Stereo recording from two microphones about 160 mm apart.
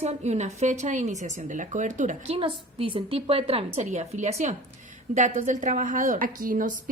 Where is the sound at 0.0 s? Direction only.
45° right (ahead or behind).